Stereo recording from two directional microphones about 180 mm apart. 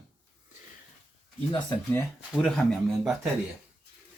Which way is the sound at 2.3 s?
5° left (ahead or behind).